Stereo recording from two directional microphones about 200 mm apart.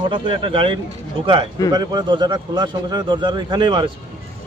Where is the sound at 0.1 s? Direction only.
25° right (ahead or behind).